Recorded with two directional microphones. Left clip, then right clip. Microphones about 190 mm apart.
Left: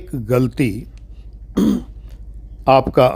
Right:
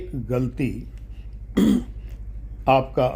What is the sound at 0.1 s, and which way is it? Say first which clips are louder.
Speech: left 9 dB; 40° left (ahead or behind).